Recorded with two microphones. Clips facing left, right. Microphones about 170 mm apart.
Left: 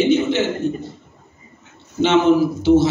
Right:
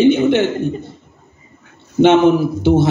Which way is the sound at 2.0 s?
55° right (ahead or behind).